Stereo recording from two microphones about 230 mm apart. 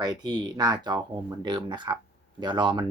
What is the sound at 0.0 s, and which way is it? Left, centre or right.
Speech, centre.